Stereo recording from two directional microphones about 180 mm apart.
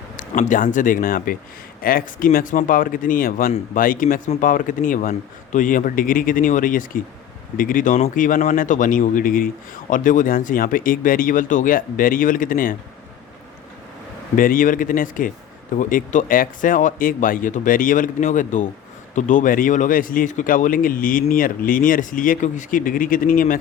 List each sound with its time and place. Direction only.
0.2 s speech: 45° left (ahead or behind)
14.3 s speech: 50° left (ahead or behind)